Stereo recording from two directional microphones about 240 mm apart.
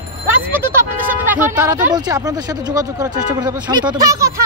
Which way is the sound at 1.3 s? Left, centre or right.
Centre.